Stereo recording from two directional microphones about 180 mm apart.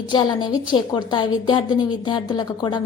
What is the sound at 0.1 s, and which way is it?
A woman's voice, 25° left (ahead or behind).